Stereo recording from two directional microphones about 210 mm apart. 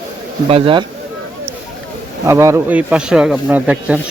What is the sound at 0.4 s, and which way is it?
Speech, 25° right (ahead or behind).